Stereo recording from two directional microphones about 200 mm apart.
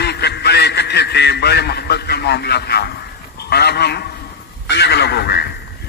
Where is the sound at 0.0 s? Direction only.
55° left (ahead or behind).